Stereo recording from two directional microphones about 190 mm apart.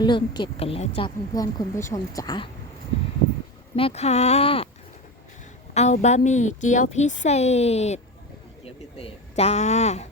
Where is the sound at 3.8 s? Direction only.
30° left (ahead or behind).